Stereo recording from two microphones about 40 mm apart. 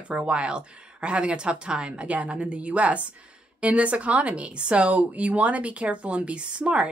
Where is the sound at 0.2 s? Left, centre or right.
Right.